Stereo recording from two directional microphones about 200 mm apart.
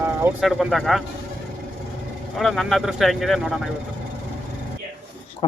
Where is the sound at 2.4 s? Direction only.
Centre (ahead or behind).